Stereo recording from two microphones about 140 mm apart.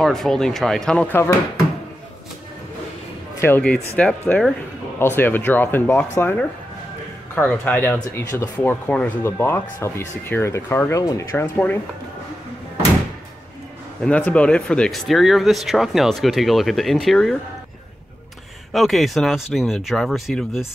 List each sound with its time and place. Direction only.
0.0 s speech: centre (ahead or behind)
3.3 s speech: 15° left (ahead or behind)
4.9 s speech: 15° left (ahead or behind)
14.0 s speech: 10° left (ahead or behind)
18.7 s speech: centre (ahead or behind)